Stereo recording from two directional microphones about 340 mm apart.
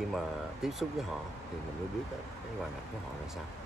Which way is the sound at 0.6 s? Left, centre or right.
Centre.